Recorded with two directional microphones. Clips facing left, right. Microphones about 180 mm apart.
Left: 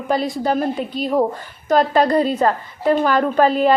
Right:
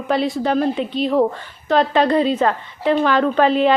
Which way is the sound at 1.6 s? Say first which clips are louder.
Even; 40° left (ahead or behind).